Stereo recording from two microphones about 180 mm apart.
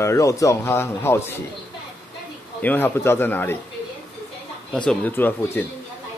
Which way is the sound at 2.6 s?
10° left (ahead or behind).